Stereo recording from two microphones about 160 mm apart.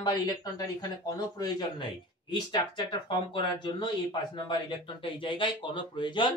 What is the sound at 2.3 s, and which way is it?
Speech, 25° left (ahead or behind).